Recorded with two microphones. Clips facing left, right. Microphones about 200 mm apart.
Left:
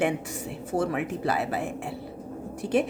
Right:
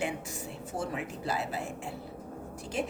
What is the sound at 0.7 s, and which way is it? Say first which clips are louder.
Speech: left 9 dB; 60° left (ahead or behind).